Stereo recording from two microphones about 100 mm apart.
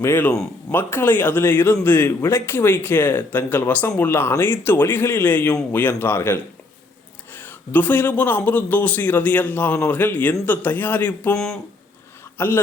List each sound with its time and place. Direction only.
0.0 s a man's voice: 25° left (ahead or behind)
11.3 s speech: 5° left (ahead or behind)
12.4 s a man's voice: 25° left (ahead or behind)